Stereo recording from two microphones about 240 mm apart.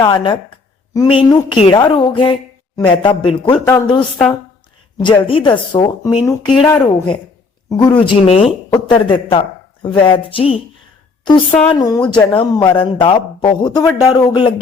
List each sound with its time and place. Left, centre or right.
0.0 s a man's voice: centre
11.7 s speech: centre
12.1 s a man's voice: centre